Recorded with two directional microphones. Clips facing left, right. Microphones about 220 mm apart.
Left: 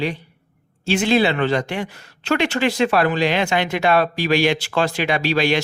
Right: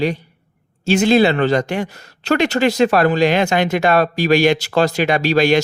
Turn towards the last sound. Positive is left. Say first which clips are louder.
# right 5 dB
turn(degrees=-45)  # may be behind; listen again after turning